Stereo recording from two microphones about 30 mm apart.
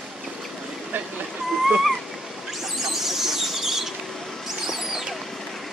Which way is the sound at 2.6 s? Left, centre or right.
Centre.